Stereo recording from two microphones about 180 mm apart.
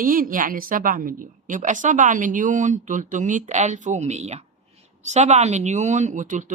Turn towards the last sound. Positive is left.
turn(degrees=-45)  # may be behind; listen again after turning